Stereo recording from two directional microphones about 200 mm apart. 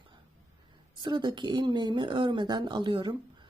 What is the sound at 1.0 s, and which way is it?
Speech, 20° right (ahead or behind).